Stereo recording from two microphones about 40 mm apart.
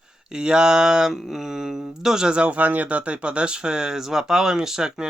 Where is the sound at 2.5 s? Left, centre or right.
Right.